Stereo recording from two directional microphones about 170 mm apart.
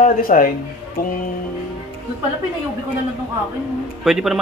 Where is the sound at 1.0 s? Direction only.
60° left (ahead or behind).